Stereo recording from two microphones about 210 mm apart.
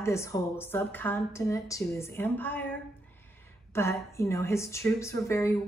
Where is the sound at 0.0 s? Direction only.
15° left (ahead or behind).